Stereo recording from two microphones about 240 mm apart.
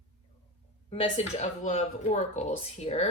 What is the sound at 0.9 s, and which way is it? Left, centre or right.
Speech, left.